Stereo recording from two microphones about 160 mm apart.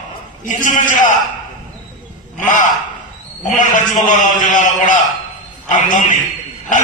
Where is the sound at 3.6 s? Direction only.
50° left (ahead or behind).